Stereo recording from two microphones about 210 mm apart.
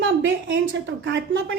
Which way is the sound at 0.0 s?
65° right (ahead or behind).